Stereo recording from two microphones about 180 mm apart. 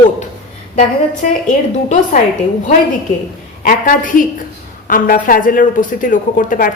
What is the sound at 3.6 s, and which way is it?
Speech, 50° left (ahead or behind).